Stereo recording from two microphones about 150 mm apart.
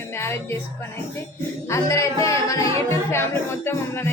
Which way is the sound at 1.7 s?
20° left (ahead or behind).